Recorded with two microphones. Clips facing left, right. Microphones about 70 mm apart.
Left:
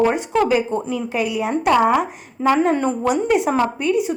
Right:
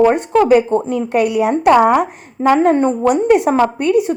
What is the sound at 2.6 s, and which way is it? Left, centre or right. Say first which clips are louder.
Speech: right 6 dB; right.